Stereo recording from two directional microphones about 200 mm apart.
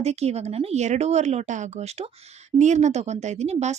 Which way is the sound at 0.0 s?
35° right (ahead or behind).